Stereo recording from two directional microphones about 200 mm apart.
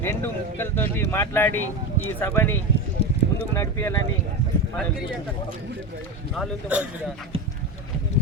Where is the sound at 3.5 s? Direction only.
15° left (ahead or behind).